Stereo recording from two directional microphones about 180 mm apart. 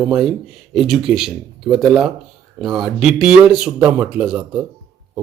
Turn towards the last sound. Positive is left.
turn(degrees=-5)  # may be behind; listen again after turning